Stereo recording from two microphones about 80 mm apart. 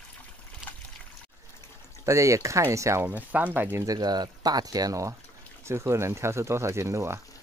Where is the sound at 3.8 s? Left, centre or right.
Right.